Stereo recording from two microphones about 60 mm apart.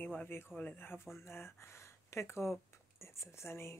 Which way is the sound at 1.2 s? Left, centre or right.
Left.